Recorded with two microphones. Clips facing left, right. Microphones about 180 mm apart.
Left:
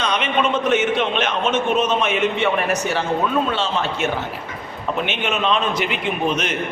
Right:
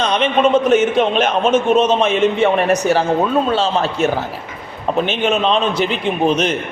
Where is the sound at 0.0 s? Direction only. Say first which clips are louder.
Right 6 dB; 35° right (ahead or behind).